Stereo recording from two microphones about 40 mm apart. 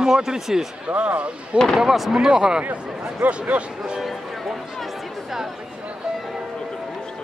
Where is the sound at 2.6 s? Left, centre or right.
Right.